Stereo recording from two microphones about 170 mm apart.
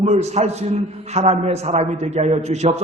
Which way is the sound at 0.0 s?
40° right (ahead or behind).